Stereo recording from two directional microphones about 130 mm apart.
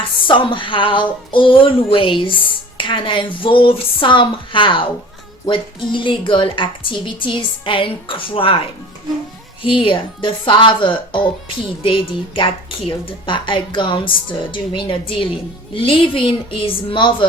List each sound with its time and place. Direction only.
0.2 s speech: 40° left (ahead or behind)
9.6 s speech: 40° left (ahead or behind)